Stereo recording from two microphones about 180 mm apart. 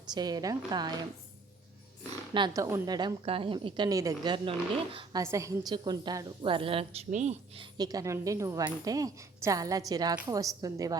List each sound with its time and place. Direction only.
0.1 s a woman's voice: 20° right (ahead or behind)
2.3 s a woman's voice: 20° right (ahead or behind)